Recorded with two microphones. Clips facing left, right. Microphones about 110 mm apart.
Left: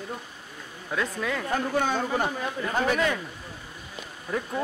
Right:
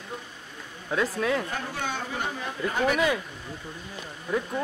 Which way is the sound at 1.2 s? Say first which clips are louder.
Right 4 dB; 10° right (ahead or behind).